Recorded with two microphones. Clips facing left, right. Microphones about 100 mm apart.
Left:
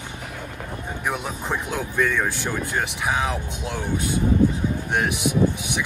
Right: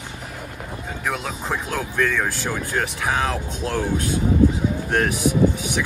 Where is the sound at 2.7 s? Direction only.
15° left (ahead or behind).